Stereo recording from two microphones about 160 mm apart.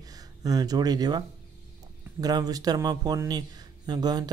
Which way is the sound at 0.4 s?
25° right (ahead or behind).